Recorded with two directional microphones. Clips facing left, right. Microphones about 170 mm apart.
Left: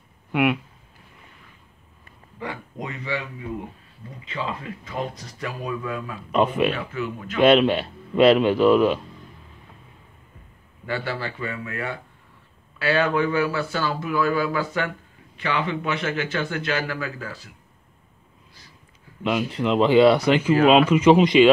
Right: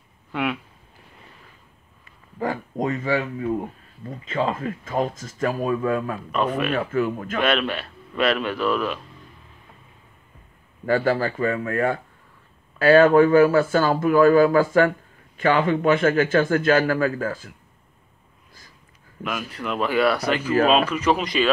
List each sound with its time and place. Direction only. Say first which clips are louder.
0.3 s speech: left 5 dB; 10° left (ahead or behind)
2.3 s speech: right 7 dB; 40° right (ahead or behind)
6.3 s speech: left 4 dB; 25° left (ahead or behind)
6.7 s speech: right 6 dB; 50° right (ahead or behind)
7.3 s speech: left 7 dB; 25° left (ahead or behind)
10.9 s speech: right 8 dB; 45° right (ahead or behind)
19.2 s speech: left 6 dB; 25° left (ahead or behind)